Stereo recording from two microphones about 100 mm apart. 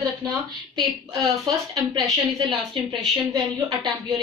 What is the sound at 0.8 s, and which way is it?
A woman's voice, 40° right (ahead or behind).